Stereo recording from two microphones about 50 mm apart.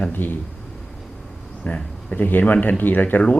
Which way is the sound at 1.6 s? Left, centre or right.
Left.